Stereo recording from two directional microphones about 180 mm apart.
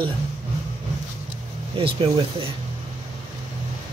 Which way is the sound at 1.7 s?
30° right (ahead or behind).